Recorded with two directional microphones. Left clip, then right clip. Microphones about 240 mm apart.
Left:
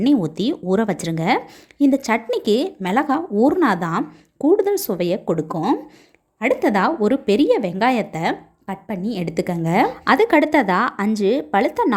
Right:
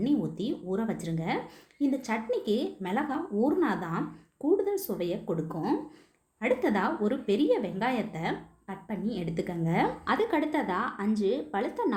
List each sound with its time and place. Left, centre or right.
0.0 s a woman's voice: left